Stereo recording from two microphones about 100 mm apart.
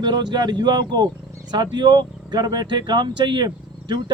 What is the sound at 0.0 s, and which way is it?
Speech, 45° right (ahead or behind).